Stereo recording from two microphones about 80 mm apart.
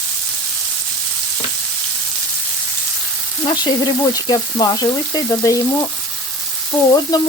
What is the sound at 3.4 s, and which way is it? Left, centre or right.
Frying, left.